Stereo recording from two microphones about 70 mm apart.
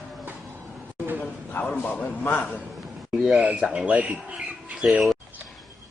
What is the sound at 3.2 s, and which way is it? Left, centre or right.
Speech, centre.